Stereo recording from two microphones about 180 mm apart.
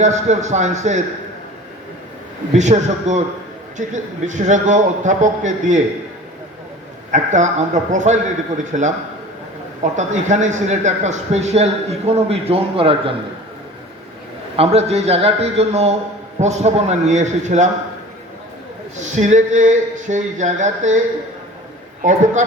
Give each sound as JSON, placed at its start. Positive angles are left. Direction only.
{"t": 0.0, "sound": "speech", "side_deg": -40}
{"t": 2.6, "sound": "speech", "side_deg": -40}
{"t": 7.1, "sound": "speech", "side_deg": -40}
{"t": 14.5, "sound": "speech", "side_deg": -35}
{"t": 18.9, "sound": "speech", "side_deg": -40}
{"t": 22.0, "sound": "speech", "side_deg": -45}